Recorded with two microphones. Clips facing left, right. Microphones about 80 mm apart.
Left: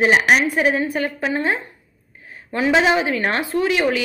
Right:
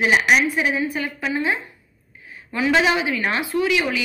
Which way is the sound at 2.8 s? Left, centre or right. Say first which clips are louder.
Left 2 dB; left.